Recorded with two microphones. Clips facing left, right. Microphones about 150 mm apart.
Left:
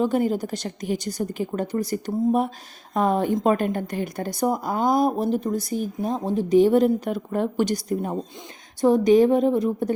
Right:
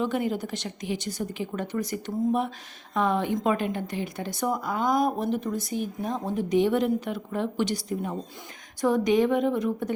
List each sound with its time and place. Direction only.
0.0 s a woman's voice: 40° left (ahead or behind)